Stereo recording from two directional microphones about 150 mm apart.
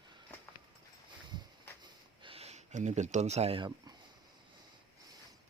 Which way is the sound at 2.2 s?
40° right (ahead or behind).